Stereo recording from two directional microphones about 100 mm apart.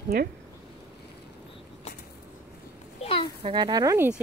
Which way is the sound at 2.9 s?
75° left (ahead or behind).